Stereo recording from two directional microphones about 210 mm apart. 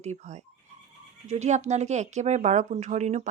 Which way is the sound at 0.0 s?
35° right (ahead or behind).